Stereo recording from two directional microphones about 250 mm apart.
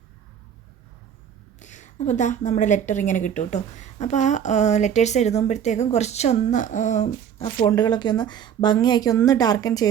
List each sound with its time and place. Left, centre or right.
1.5 s a woman's voice: left